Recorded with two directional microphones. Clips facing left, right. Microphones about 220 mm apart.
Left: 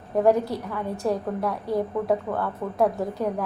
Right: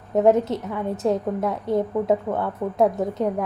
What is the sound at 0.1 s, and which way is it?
A woman's voice, 20° right (ahead or behind).